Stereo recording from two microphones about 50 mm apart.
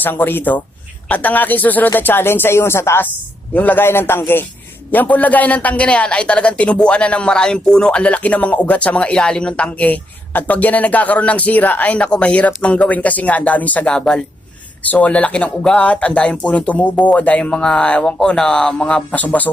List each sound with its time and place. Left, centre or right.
0.0 s speech: left
3.5 s speech: left
3.8 s speech: left
4.9 s a man's voice: left
13.9 s a man's voice: centre
17.5 s a man's voice: centre
19.1 s speech: left